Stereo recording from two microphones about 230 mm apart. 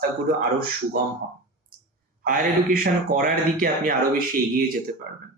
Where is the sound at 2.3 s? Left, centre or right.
Right.